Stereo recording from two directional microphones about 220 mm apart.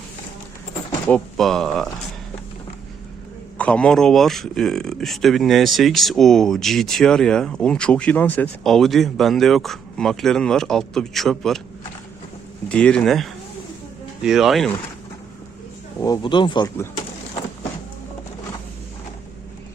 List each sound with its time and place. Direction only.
1.0 s speech: 5° left (ahead or behind)
3.6 s speech: 5° left (ahead or behind)
12.6 s speech: 5° left (ahead or behind)
16.0 s speech: 15° left (ahead or behind)